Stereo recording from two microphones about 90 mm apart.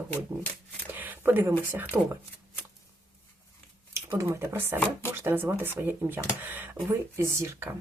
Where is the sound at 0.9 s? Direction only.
20° right (ahead or behind).